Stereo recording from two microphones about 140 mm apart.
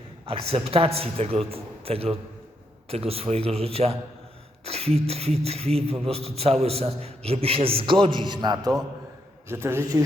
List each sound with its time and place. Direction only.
0.3 s a man's voice: 40° right (ahead or behind)
9.5 s a man's voice: 20° right (ahead or behind)